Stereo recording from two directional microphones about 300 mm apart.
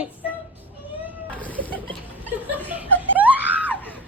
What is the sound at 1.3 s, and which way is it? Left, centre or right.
Cat, centre.